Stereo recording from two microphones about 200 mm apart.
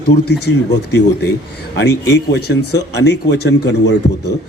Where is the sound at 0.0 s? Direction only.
55° left (ahead or behind).